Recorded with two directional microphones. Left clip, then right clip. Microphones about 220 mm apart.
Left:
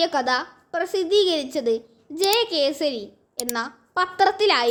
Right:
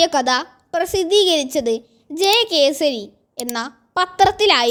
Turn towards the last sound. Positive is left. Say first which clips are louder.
# right 5 dB
turn(degrees=-35)  # may be behind; listen again after turning